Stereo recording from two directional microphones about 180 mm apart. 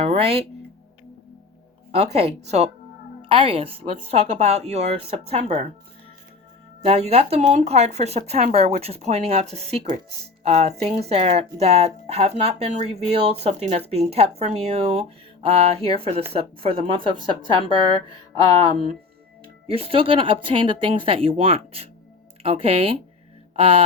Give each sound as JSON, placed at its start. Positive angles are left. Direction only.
{"t": 0.0, "sound": "music", "side_deg": -35}
{"t": 2.1, "sound": "speech", "side_deg": -35}
{"t": 6.8, "sound": "a woman's voice", "side_deg": -35}
{"t": 19.6, "sound": "speech", "side_deg": -30}